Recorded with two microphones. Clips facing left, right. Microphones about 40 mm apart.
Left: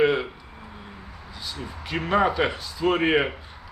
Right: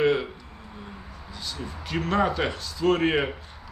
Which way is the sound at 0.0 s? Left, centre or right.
Centre.